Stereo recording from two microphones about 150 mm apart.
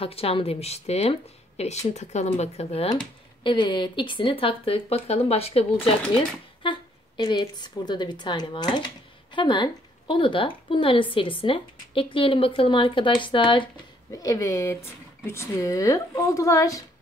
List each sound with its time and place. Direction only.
0.0 s speech: 40° left (ahead or behind)
6.6 s speech: 30° left (ahead or behind)
14.1 s speech: 20° left (ahead or behind)